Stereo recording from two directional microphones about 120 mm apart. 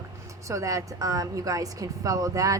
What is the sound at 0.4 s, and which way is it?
A woman's voice, 25° right (ahead or behind).